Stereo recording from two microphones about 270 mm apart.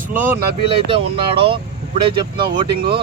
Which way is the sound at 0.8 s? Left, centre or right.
Centre.